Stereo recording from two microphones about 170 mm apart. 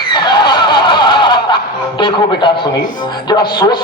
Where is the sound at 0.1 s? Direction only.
25° left (ahead or behind).